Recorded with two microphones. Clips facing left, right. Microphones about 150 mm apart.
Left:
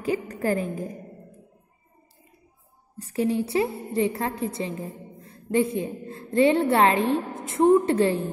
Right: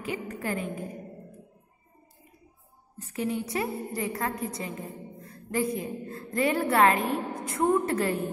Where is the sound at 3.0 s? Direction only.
35° left (ahead or behind).